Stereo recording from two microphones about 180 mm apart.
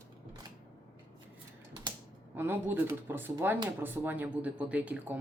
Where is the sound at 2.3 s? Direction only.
10° right (ahead or behind).